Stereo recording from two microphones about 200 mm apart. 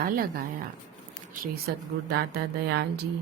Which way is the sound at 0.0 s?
50° right (ahead or behind).